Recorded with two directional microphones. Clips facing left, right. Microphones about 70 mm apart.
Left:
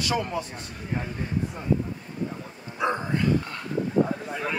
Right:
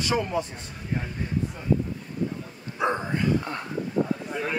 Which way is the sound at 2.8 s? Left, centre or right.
Right.